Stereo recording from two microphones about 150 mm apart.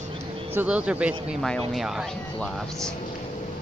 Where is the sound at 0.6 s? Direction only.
10° right (ahead or behind).